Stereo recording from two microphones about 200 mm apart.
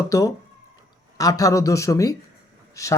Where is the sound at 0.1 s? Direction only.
15° left (ahead or behind).